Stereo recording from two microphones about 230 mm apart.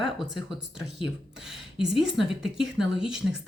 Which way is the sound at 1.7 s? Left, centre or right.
Centre.